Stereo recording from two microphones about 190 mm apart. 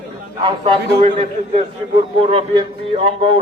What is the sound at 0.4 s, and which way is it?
A man's voice, 25° right (ahead or behind).